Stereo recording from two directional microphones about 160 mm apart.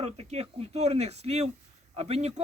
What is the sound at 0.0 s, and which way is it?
A man's voice, 40° right (ahead or behind).